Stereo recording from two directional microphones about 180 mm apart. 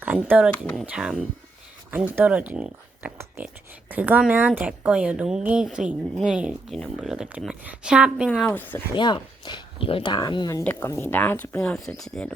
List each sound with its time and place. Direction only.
0.0 s a woman's voice: 10° right (ahead or behind)
8.3 s speech: 5° left (ahead or behind)
9.0 s speech: 25° left (ahead or behind)
10.6 s speech: 10° left (ahead or behind)